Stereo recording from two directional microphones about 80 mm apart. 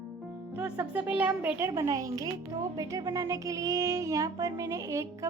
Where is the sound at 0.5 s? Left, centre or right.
Centre.